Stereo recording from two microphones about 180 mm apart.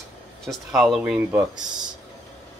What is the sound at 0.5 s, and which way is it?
Speech, centre (ahead or behind).